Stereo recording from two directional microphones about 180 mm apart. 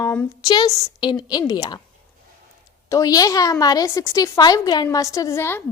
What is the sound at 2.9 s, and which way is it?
A woman's voice, 20° left (ahead or behind).